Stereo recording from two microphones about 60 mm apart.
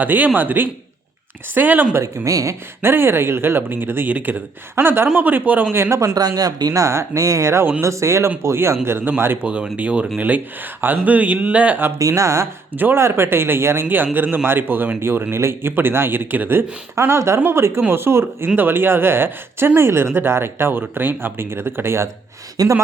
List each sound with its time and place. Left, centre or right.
0.0 s speech: right
2.0 s speech: right
2.8 s speech: right
5.7 s speech: right
6.0 s speech: right
9.4 s speech: right
11.9 s speech: right
12.7 s speech: right
13.0 s speech: right
13.8 s speech: right
16.9 s speech: right
22.6 s speech: right